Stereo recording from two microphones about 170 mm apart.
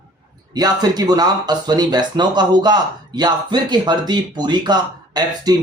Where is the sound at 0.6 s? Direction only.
25° right (ahead or behind).